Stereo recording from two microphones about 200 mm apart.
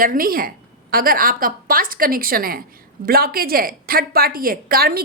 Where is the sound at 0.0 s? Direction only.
45° right (ahead or behind).